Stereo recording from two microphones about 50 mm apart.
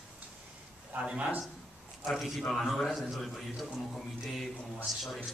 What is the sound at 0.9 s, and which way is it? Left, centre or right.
Speech, right.